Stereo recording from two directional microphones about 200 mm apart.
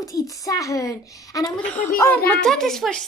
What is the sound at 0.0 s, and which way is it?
A child's voice, 15° left (ahead or behind).